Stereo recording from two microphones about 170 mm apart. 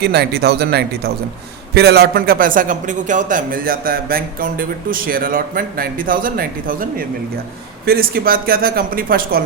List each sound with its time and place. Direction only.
0.0 s a man's voice: 70° right (ahead or behind)